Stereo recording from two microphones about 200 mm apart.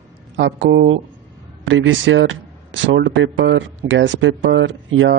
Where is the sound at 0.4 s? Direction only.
60° right (ahead or behind).